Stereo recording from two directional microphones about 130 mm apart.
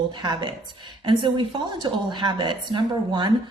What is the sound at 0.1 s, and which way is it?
A woman's voice, 35° right (ahead or behind).